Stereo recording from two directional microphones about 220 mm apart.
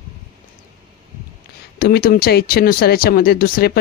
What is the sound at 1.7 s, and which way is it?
Speech, 45° left (ahead or behind).